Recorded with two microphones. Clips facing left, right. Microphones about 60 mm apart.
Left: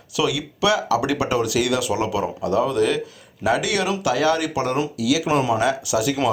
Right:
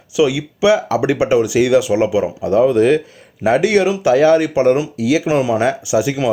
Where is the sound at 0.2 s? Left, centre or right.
Right.